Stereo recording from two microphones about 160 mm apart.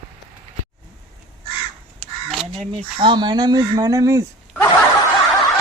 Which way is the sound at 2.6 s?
30° right (ahead or behind).